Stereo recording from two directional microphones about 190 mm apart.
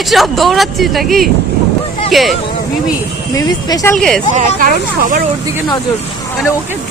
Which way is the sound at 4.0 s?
5° left (ahead or behind).